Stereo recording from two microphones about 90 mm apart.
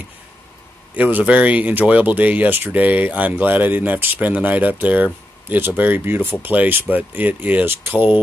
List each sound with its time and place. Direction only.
0.9 s speech: 15° right (ahead or behind)